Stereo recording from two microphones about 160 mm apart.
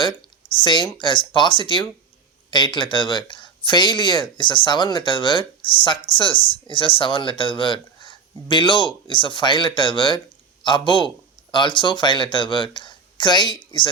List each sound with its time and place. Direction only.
0.0 s speech: 30° left (ahead or behind)